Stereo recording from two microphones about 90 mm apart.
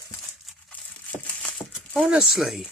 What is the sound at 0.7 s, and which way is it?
Crushing, 15° left (ahead or behind).